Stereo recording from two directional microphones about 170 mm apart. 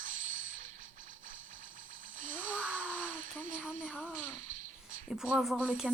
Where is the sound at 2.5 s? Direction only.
10° right (ahead or behind).